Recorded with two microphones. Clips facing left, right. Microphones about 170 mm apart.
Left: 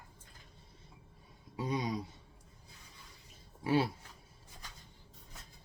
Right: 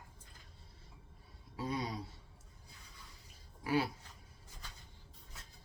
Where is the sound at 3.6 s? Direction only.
25° left (ahead or behind).